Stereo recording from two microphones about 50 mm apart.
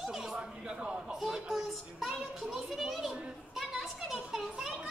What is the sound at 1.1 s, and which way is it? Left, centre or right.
Child singing, centre.